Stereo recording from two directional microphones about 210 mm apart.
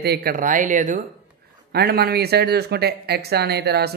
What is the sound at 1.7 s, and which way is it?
Speech, 50° right (ahead or behind).